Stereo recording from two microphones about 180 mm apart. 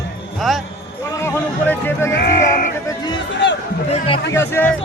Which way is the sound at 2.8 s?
25° left (ahead or behind).